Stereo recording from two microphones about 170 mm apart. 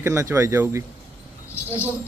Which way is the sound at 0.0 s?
15° right (ahead or behind).